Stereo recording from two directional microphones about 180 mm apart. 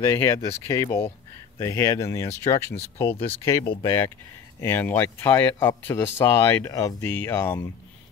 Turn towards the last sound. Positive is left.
turn(degrees=10)  # may be behind; listen again after turning